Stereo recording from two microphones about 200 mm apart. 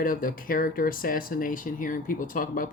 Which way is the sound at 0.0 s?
45° left (ahead or behind).